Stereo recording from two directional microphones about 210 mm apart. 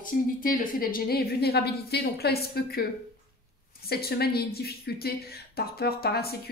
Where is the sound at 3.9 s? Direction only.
50° left (ahead or behind).